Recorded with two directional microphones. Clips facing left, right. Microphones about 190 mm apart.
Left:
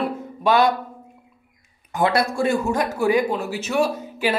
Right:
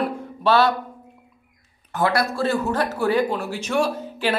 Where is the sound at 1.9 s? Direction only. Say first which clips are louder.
Left 1 dB; 15° left (ahead or behind).